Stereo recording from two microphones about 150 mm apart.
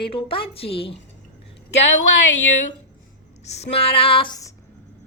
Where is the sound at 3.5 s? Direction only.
45° left (ahead or behind).